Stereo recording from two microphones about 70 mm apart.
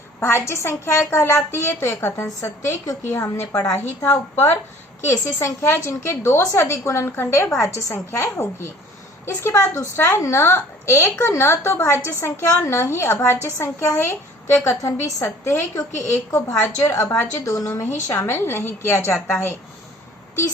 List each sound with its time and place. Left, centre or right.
0.2 s a woman's voice: left
2.2 s a woman's voice: left
5.0 s a woman's voice: left
16.6 s a woman's voice: left
16.9 s a woman's voice: left